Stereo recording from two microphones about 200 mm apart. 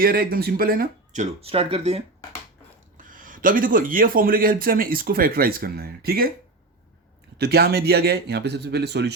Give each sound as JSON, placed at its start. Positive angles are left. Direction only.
{"t": 0.0, "sound": "a man's voice", "side_deg": -45}
{"t": 3.0, "sound": "a man's voice", "side_deg": -40}
{"t": 7.3, "sound": "speech", "side_deg": -55}